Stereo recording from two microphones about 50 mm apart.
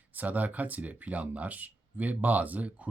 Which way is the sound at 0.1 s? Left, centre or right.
Right.